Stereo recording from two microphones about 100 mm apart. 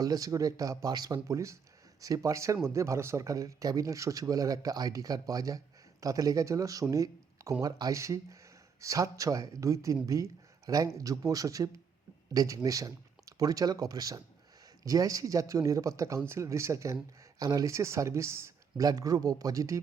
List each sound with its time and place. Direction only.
0.0 s speech: 35° right (ahead or behind)
6.9 s a sound: 35° right (ahead or behind)
7.6 s speech: 35° right (ahead or behind)